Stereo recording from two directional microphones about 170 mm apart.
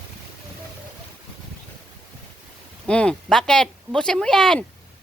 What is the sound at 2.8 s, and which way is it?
Speech, 5° left (ahead or behind).